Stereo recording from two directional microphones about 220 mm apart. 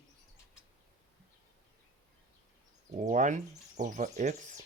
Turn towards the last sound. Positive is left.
turn(degrees=-35)  # may be behind; listen again after turning